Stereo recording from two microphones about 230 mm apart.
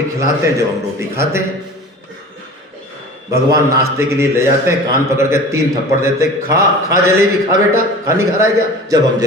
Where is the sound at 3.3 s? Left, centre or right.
Centre.